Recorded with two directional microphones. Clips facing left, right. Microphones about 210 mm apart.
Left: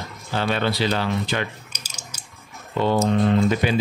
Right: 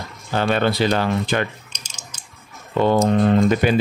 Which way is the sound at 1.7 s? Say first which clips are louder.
Left 1 dB; 5° left (ahead or behind).